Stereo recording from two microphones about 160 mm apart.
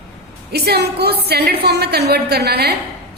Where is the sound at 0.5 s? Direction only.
85° right.